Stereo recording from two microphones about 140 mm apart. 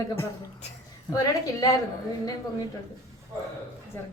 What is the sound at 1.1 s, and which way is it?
Speech, 30° left (ahead or behind).